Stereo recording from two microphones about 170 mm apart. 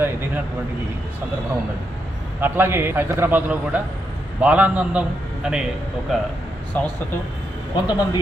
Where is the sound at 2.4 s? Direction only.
15° right (ahead or behind).